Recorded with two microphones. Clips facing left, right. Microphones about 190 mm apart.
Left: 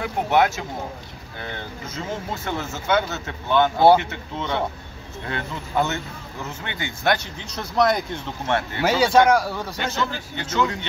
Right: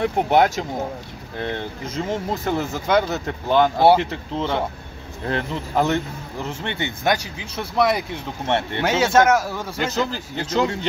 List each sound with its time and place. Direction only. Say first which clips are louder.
0.0 s speech: right 3 dB; 35° right (ahead or behind)
2.0 s speech: right 5 dB; 35° right (ahead or behind)
7.3 s speech: even; 5° right (ahead or behind)
8.5 s speech: right 2 dB; 25° right (ahead or behind)
8.8 s speech: left 1 dB; centre (ahead or behind)
9.9 s speech: right 3 dB; 35° right (ahead or behind)